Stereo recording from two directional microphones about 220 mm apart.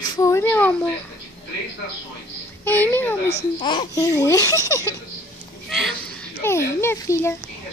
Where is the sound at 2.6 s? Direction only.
10° left (ahead or behind).